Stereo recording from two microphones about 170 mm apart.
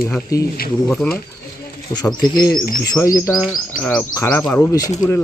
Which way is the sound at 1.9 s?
25° left (ahead or behind).